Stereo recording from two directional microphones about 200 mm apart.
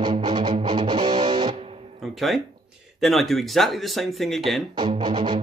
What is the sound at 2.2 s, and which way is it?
Speech, centre (ahead or behind).